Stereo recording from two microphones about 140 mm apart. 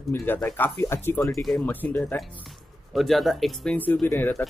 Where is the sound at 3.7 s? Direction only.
15° left (ahead or behind).